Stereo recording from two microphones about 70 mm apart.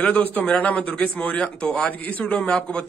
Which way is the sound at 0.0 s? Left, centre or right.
Left.